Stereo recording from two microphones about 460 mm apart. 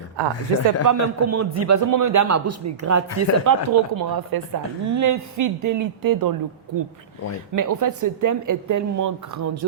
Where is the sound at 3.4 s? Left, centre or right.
Right.